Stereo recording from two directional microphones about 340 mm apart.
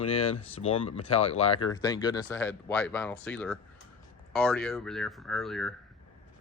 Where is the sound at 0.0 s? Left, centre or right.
Centre.